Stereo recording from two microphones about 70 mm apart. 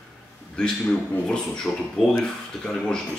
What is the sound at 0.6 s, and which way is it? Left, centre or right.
A man's voice, centre.